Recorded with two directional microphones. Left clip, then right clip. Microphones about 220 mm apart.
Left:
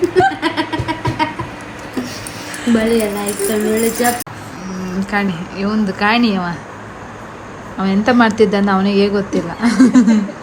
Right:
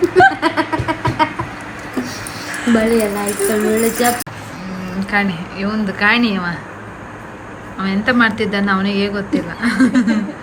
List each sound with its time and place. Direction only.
0.0 s chuckle: 5° right (ahead or behind)
2.0 s speech: 5° right (ahead or behind)
4.9 s a woman's voice: 15° left (ahead or behind)
7.8 s a woman's voice: 20° left (ahead or behind)